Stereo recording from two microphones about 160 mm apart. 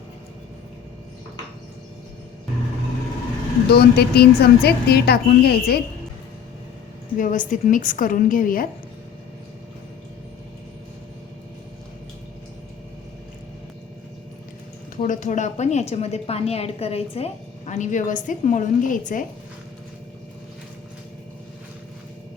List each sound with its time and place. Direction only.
3.7 s a woman's voice: 80° left
7.2 s a woman's voice: 55° left (ahead or behind)
14.9 s a woman's voice: 55° left (ahead or behind)